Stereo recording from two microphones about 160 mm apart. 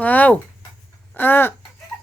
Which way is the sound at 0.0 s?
10° left (ahead or behind).